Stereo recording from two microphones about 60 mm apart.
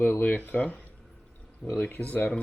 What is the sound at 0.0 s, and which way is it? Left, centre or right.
Speech, left.